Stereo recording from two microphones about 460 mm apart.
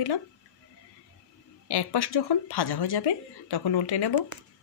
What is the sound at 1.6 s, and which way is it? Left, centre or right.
Speech, left.